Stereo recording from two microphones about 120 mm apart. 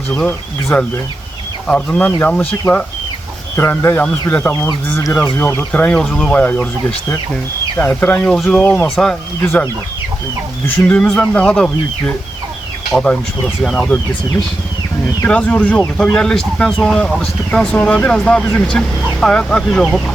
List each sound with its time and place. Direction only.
0.1 s speech: 15° left (ahead or behind)
7.8 s speech: 15° left (ahead or behind)
10.7 s speech: 10° left (ahead or behind)
15.2 s speech: 10° left (ahead or behind)